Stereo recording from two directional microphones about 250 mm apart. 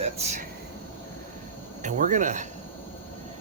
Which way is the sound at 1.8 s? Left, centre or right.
Right.